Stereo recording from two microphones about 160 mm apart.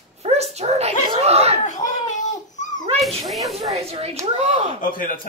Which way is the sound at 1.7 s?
50° left (ahead or behind).